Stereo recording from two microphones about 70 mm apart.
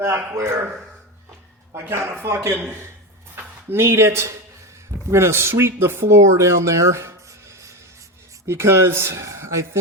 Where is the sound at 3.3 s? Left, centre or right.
Right.